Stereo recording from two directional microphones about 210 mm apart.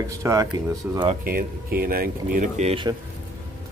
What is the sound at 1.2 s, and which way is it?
Speech, 45° right (ahead or behind).